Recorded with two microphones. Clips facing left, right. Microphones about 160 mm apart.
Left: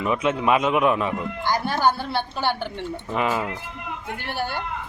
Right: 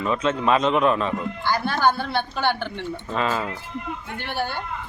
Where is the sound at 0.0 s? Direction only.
15° left (ahead or behind).